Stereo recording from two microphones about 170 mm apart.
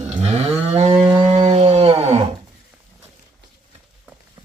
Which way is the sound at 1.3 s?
40° right (ahead or behind).